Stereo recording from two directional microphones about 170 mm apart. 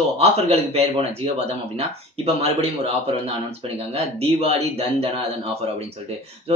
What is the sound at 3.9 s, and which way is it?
Speech, 35° right (ahead or behind).